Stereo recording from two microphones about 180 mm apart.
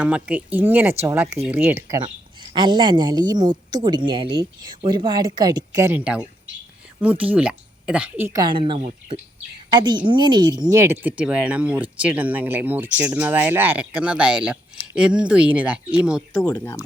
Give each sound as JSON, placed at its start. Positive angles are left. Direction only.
{"t": 0.0, "sound": "speech", "side_deg": -5}
{"t": 2.6, "sound": "speech", "side_deg": -25}
{"t": 8.4, "sound": "speech", "side_deg": -25}
{"t": 11.0, "sound": "speech", "side_deg": -5}
{"t": 16.3, "sound": "speech", "side_deg": 20}